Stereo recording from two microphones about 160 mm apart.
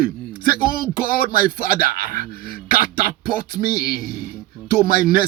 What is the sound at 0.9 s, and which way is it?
Speech, 70° left (ahead or behind).